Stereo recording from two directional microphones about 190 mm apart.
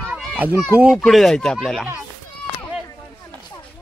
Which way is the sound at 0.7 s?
5° right (ahead or behind).